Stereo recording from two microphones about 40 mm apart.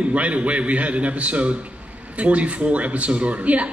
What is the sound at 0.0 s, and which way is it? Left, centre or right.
A man's voice, right.